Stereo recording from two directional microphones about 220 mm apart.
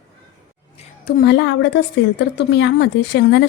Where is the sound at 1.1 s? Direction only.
45° left (ahead or behind).